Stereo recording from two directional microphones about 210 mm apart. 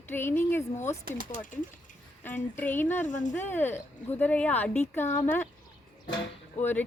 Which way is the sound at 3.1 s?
35° left (ahead or behind).